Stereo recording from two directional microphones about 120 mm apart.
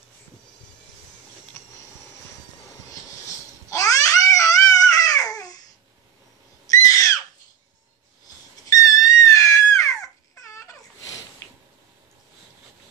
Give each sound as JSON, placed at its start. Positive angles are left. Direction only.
{"t": 2.9, "sound": "babbling", "side_deg": 25}
{"t": 6.7, "sound": "a sound", "side_deg": 30}
{"t": 8.6, "sound": "crying", "side_deg": 30}